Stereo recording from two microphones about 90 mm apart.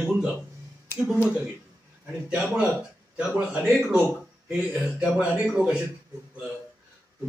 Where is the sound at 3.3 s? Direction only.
15° right (ahead or behind).